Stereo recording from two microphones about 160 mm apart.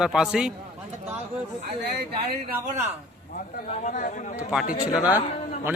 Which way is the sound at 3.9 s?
50° left (ahead or behind).